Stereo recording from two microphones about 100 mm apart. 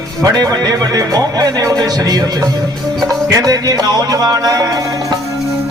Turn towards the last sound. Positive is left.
turn(degrees=-40)  # may be behind; listen again after turning